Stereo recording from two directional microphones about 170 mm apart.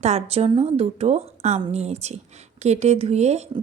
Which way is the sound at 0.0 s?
40° right (ahead or behind).